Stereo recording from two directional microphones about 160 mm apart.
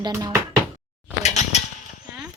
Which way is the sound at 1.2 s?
45° left (ahead or behind).